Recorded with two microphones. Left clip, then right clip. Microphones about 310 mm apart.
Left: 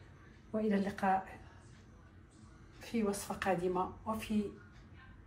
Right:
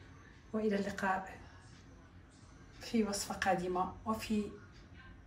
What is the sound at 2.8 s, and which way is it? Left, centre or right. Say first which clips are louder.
Speech: right 1 dB; centre.